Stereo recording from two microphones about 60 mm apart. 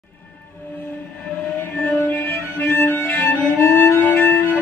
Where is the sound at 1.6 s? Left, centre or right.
Left.